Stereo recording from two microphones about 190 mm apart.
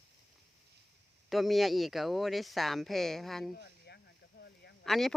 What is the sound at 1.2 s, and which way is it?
Speech, centre (ahead or behind).